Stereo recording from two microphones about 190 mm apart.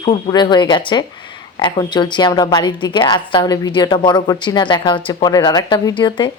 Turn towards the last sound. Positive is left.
turn(degrees=25)  # may be behind; listen again after turning